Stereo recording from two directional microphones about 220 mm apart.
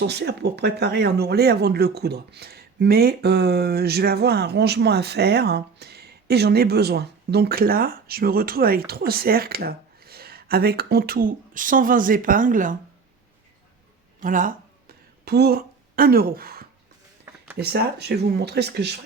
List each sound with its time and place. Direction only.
0.0 s speech: 50° right (ahead or behind)
14.2 s a sound: 35° right (ahead or behind)
17.6 s speech: 45° right (ahead or behind)